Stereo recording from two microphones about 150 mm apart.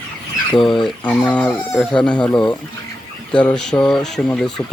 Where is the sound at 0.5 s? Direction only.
Centre (ahead or behind).